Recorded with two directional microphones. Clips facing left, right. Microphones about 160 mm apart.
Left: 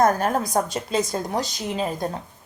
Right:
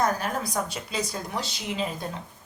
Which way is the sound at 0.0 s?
45° left (ahead or behind).